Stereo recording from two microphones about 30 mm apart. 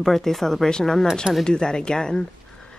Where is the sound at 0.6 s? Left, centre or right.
Centre.